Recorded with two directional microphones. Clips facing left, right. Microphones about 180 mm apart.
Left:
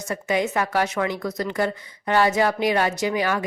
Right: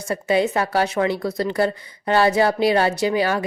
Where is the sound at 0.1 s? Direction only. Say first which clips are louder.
Right 4 dB; 30° right (ahead or behind).